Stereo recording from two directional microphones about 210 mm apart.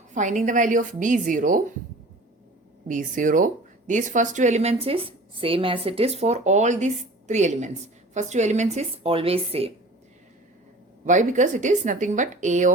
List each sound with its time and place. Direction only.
0.1 s speech: 35° right (ahead or behind)
2.8 s speech: 40° right (ahead or behind)
11.0 s speech: 35° right (ahead or behind)